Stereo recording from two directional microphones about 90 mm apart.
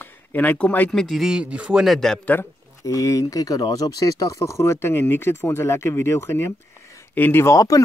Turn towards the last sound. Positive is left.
turn(degrees=40)  # may be behind; listen again after turning